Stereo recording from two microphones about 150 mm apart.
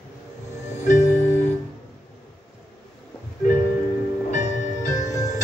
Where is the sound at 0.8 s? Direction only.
55° left (ahead or behind).